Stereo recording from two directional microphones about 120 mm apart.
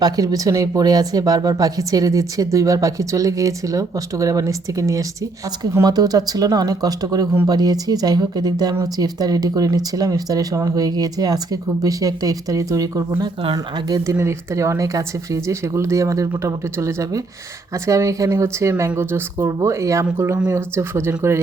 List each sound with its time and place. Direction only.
0.0 s speech: 30° right (ahead or behind)